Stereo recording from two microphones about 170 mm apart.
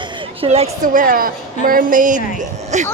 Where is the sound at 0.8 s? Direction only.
55° right (ahead or behind).